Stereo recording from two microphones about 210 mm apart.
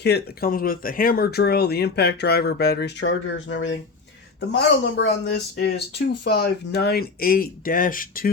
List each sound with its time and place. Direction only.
0.0 s speech: 50° left (ahead or behind)